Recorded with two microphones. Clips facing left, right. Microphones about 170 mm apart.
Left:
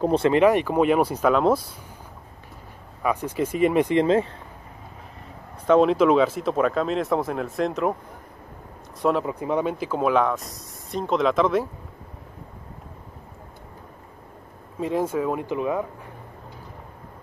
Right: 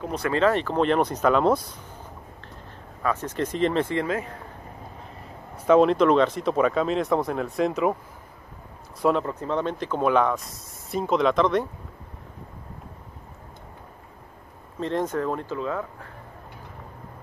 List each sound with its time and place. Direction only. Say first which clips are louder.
0.0 s speech: left 8 dB; 30° left (ahead or behind)
0.3 s speech: left 1 dB; 15° left (ahead or behind)
3.0 s speech: left 2 dB; 15° left (ahead or behind)
5.7 s speech: even; centre (ahead or behind)
9.0 s speech: even; 5° left (ahead or behind)
14.8 s speech: left 2 dB; 10° left (ahead or behind)